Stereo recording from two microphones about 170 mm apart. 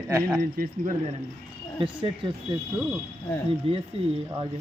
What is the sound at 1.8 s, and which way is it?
Speech, 30° right (ahead or behind).